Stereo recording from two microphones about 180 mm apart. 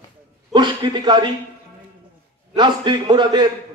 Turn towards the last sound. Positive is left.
turn(degrees=-25)  # may be behind; listen again after turning